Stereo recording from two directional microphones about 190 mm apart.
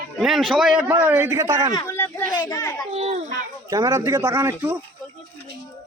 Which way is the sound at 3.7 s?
15° right (ahead or behind).